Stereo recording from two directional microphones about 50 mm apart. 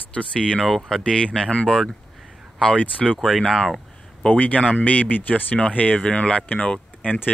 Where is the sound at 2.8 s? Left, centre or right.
Left.